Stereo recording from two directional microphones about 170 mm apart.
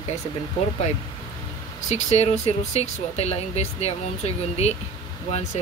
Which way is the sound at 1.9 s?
40° left (ahead or behind).